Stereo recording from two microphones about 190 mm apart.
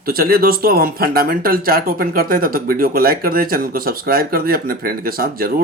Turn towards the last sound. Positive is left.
turn(degrees=-50)  # may be behind; listen again after turning